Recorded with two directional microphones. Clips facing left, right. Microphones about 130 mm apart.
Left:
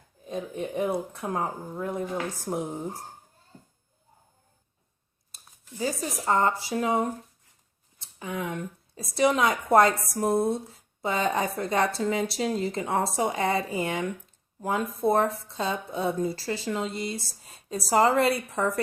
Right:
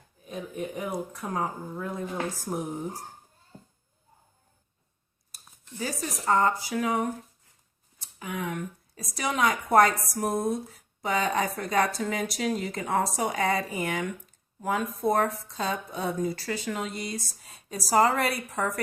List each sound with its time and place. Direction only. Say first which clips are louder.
0.3 s speech: left 2 dB; 25° left (ahead or behind)
5.8 s speech: left 2 dB; 25° left (ahead or behind)